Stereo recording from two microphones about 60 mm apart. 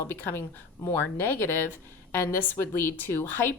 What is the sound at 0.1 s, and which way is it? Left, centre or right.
Speech, left.